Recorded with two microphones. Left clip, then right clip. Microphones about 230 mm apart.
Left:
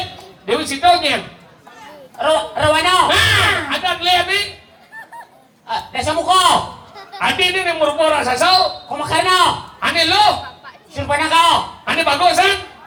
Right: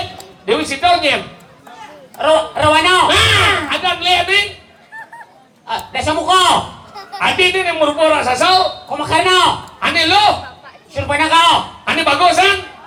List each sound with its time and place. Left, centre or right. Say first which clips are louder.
0.4 s a woman's voice: even; right
5.6 s a woman's voice: right 2 dB; right